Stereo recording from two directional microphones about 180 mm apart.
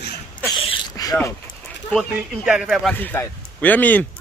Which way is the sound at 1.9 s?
5° right (ahead or behind).